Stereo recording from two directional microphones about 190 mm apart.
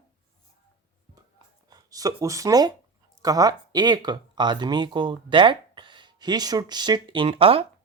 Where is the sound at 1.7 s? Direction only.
20° right (ahead or behind).